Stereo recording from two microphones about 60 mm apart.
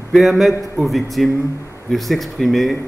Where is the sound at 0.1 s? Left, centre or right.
Centre.